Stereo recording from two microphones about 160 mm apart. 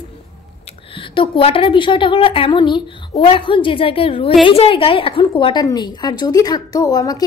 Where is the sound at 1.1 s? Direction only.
35° left (ahead or behind).